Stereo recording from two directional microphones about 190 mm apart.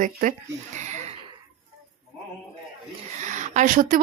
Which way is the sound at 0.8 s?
40° right (ahead or behind).